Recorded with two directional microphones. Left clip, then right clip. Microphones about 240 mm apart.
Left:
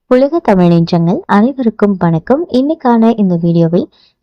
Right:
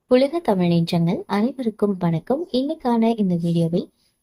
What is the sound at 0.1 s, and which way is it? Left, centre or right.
A woman's voice, left.